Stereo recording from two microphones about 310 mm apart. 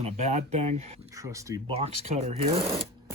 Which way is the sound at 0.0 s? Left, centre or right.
Right.